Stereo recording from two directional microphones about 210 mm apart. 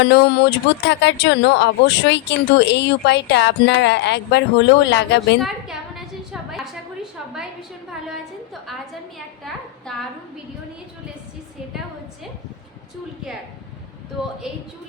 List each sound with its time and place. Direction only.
0.0 s speech: 55° left (ahead or behind)
5.4 s a woman's voice: centre (ahead or behind)